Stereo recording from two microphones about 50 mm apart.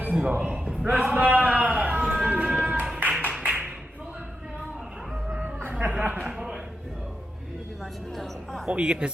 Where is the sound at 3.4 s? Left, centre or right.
Right.